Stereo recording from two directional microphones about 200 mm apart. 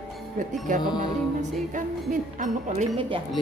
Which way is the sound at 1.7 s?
40° right (ahead or behind).